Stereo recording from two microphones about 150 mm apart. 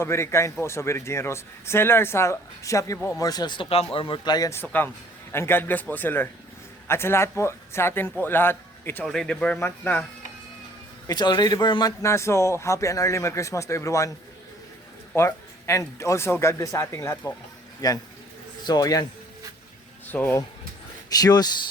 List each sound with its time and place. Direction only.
0.0 s speech: 15° left (ahead or behind)
9.0 s speech: 5° left (ahead or behind)
11.0 s speech: 25° left (ahead or behind)
15.1 s a sound: 15° left (ahead or behind)
16.0 s a man's voice: 20° left (ahead or behind)
20.1 s speech: 10° left (ahead or behind)
21.2 s speech: 25° left (ahead or behind)